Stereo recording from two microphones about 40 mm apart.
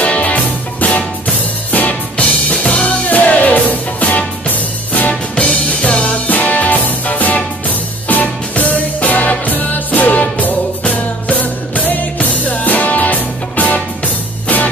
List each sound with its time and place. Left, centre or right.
0.0 s music: left
5.3 s music: left